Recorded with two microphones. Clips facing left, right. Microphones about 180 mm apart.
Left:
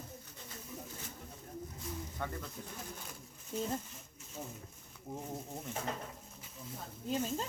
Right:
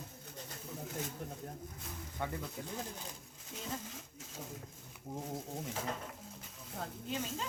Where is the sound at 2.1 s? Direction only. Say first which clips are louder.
Right 4 dB; 15° right (ahead or behind).